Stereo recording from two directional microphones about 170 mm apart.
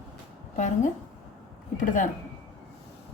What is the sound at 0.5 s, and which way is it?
A woman's voice, 45° left (ahead or behind).